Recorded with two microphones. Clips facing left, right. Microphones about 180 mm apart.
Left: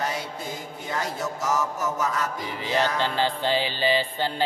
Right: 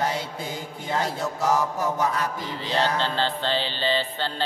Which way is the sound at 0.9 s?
30° right (ahead or behind).